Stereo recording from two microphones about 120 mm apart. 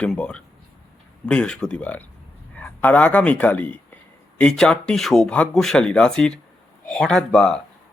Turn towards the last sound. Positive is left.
turn(degrees=5)  # may be behind; listen again after turning